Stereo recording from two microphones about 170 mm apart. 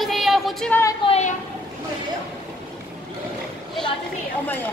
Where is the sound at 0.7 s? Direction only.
15° left (ahead or behind).